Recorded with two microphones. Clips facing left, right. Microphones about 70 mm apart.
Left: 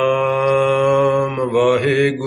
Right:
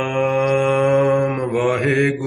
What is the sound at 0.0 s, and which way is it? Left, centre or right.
Mantra, centre.